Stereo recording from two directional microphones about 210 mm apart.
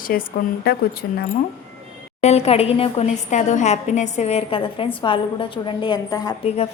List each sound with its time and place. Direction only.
0.1 s a woman's voice: 45° left (ahead or behind)
2.2 s a woman's voice: 30° left (ahead or behind)